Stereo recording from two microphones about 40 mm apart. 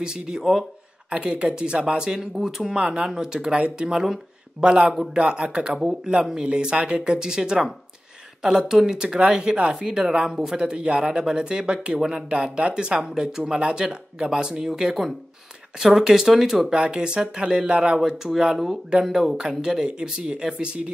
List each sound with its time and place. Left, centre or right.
0.0 s speech: centre
1.2 s speech: right
10.6 s speech: right
15.8 s speech: centre
16.7 s speech: right
17.9 s speech: centre; by 20.9 s right